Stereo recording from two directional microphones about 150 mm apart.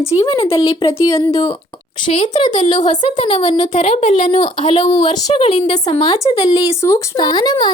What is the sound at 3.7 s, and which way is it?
Speech, 55° left (ahead or behind).